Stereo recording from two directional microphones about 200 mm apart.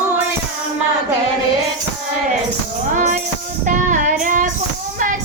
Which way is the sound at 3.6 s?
40° right (ahead or behind).